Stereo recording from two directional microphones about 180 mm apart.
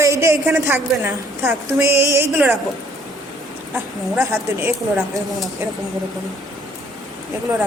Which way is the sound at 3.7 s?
15° right (ahead or behind).